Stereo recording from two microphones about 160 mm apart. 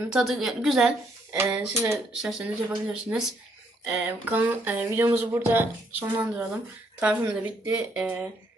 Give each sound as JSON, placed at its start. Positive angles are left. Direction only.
{"t": 0.1, "sound": "a woman's voice", "side_deg": 0}